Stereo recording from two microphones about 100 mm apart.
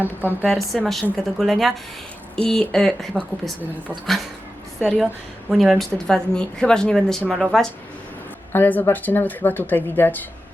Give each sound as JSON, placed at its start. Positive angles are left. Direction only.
{"t": 0.0, "sound": "a woman's voice", "side_deg": -20}
{"t": 0.4, "sound": "speech", "side_deg": 0}
{"t": 4.8, "sound": "speech", "side_deg": 0}
{"t": 8.5, "sound": "speech", "side_deg": 20}